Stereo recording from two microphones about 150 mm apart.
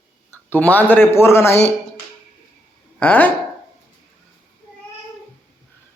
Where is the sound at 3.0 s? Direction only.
10° left (ahead or behind).